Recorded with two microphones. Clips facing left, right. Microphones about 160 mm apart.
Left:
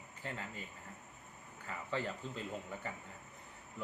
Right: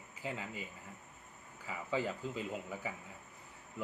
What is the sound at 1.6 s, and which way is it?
Speech, 5° right (ahead or behind).